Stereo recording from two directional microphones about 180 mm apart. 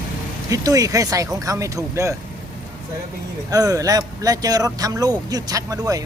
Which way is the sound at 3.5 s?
20° right (ahead or behind).